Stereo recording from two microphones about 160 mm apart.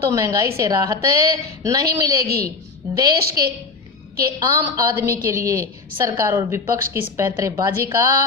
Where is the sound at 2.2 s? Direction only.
75° right (ahead or behind).